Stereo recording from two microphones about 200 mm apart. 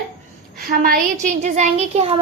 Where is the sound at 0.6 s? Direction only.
45° right (ahead or behind); by 2.2 s 30° right (ahead or behind).